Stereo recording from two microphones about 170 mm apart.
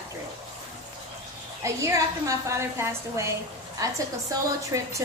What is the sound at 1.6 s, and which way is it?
A woman's voice, 15° right (ahead or behind).